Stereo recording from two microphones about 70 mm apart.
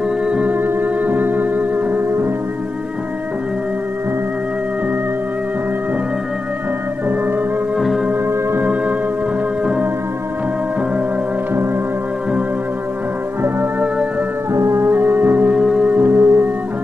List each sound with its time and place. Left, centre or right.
0.3 s music: right
7.8 s music: centre
8.3 s music: right
14.5 s music: right
15.5 s music: centre
15.9 s music: right